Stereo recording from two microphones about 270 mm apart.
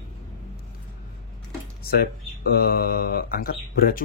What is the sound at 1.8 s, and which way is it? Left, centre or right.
Speech, left.